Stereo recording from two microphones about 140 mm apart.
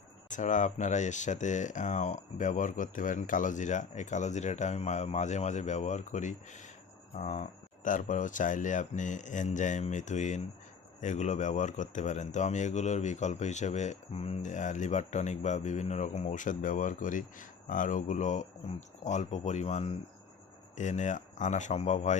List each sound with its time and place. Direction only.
0.3 s speech: 65° left (ahead or behind)
7.9 s speech: 65° left (ahead or behind); by 20.0 s 50° left (ahead or behind)
20.7 s speech: 60° left (ahead or behind)